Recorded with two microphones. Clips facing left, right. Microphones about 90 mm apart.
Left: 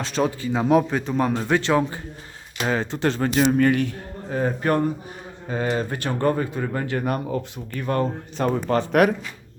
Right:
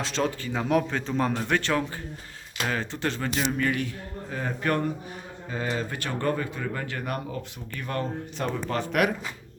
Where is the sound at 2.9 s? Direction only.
35° left (ahead or behind).